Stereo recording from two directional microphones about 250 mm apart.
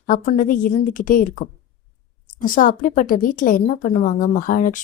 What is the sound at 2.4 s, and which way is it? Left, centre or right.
Speech, left.